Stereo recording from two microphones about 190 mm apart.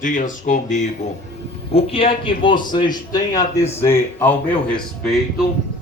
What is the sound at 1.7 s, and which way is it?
A man's voice, 30° left (ahead or behind).